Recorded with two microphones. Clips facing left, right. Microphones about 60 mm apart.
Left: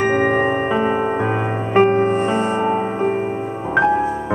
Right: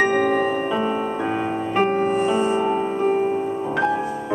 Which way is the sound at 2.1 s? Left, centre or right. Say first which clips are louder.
Left 1 dB; centre.